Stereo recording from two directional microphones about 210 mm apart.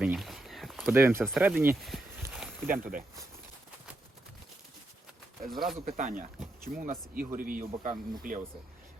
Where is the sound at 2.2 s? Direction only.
5° right (ahead or behind).